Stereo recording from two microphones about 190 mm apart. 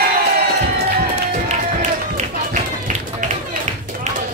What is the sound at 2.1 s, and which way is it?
Run, 40° right (ahead or behind).